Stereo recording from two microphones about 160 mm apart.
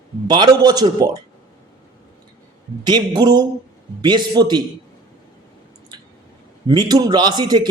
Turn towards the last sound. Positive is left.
turn(degrees=-25)  # may be behind; listen again after turning